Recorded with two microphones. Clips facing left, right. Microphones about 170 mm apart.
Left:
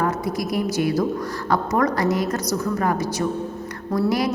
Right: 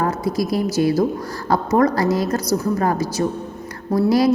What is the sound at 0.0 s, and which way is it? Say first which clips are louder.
A woman's voice: right 3 dB; 30° right (ahead or behind).